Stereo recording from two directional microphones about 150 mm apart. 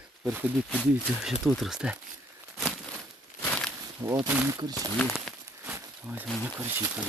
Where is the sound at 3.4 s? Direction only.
5° left (ahead or behind).